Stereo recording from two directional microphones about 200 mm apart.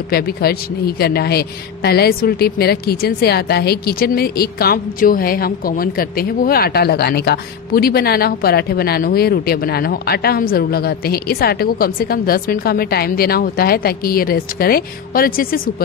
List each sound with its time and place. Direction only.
0.1 s a man's voice: 50° left (ahead or behind)